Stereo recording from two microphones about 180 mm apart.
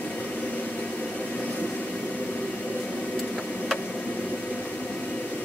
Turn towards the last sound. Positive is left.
turn(degrees=5)  # may be behind; listen again after turning